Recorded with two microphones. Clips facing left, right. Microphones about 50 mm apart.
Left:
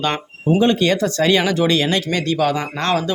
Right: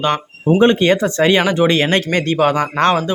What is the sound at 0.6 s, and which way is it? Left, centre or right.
Speech, right.